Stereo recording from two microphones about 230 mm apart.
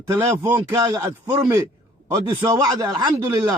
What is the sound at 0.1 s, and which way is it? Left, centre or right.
A man's voice, centre.